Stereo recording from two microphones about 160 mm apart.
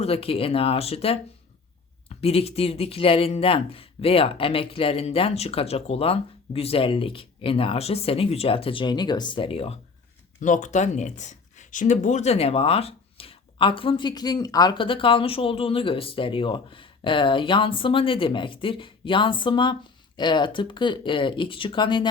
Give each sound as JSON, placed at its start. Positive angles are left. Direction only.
{"t": 0.0, "sound": "speech", "side_deg": 35}
{"t": 10.4, "sound": "speech", "side_deg": 50}